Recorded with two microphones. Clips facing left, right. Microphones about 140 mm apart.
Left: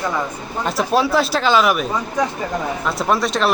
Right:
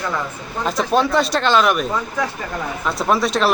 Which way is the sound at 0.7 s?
5° left (ahead or behind).